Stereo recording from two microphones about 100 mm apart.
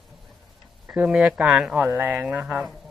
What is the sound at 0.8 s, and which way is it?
Speech, 10° right (ahead or behind).